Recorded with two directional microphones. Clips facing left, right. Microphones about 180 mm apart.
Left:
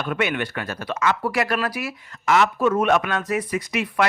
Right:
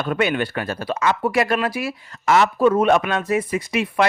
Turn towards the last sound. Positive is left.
turn(degrees=-25)  # may be behind; listen again after turning